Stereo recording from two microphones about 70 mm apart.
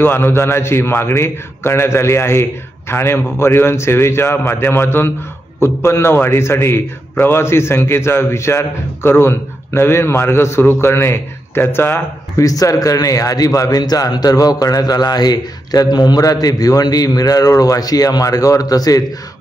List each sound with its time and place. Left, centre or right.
0.0 s a man's voice: left
12.4 s a man's voice: left